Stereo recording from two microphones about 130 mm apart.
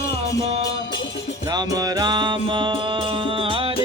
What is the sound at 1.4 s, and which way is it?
Music, 30° right (ahead or behind).